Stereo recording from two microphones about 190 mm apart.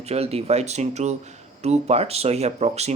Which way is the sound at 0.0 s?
35° right (ahead or behind).